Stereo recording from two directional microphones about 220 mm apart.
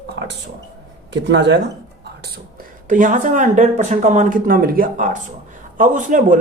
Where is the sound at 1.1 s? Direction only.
50° right (ahead or behind).